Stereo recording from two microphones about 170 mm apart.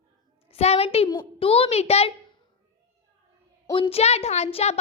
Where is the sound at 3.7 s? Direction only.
35° left (ahead or behind).